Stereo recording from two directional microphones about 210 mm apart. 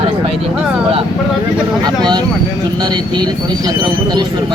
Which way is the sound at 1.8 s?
20° right (ahead or behind).